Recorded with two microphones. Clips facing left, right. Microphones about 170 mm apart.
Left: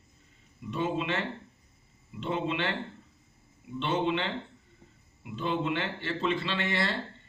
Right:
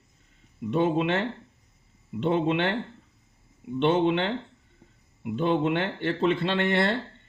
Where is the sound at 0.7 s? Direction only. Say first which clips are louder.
Right 7 dB; 55° right (ahead or behind).